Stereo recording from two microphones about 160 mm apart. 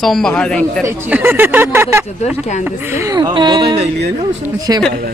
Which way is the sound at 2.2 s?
45° left (ahead or behind).